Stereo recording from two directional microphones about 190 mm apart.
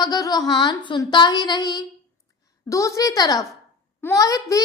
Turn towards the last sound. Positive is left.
turn(degrees=20)  # may be behind; listen again after turning